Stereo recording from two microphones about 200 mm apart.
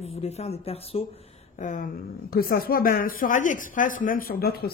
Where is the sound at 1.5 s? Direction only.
40° left (ahead or behind).